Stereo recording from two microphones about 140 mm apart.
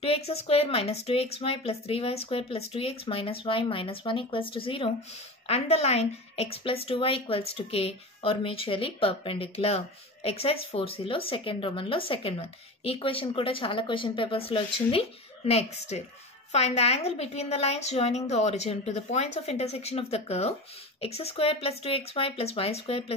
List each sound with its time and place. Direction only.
0.0 s a woman's voice: 45° left (ahead or behind)